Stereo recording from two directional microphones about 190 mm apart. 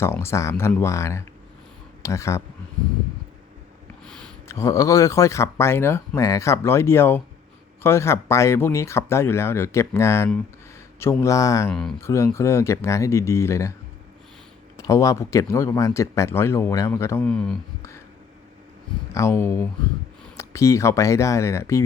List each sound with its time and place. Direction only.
0.0 s speech: 15° left (ahead or behind)
4.0 s a sound: 5° left (ahead or behind)
4.4 s speech: 15° left (ahead or behind)
11.7 s speech: 5° left (ahead or behind)
11.9 s speech: 15° left (ahead or behind)
14.8 s speech: 15° left (ahead or behind)
19.1 s speech: 15° left (ahead or behind)